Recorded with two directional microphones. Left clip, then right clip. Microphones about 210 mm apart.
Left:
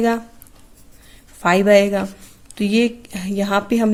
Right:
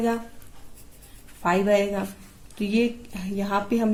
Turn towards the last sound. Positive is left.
turn(degrees=50)  # may be behind; listen again after turning